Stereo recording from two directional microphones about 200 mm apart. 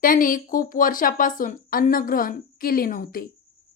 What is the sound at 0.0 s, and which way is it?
Speech, 45° left (ahead or behind).